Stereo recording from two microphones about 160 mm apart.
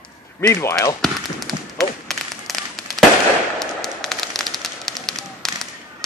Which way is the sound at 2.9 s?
Centre (ahead or behind).